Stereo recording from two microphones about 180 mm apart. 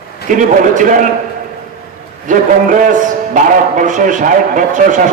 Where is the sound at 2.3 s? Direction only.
45° right (ahead or behind).